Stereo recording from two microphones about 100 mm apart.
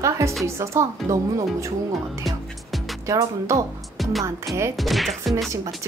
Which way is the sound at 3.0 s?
30° right (ahead or behind).